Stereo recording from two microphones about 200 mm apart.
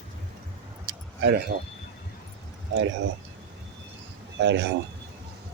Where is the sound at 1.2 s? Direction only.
60° right (ahead or behind).